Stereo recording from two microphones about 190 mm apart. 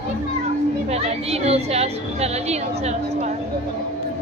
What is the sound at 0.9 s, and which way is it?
A woman's voice, 35° right (ahead or behind).